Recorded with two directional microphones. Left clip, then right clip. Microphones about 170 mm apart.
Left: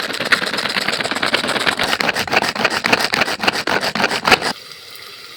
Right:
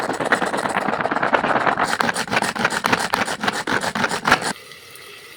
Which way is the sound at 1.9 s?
15° left (ahead or behind).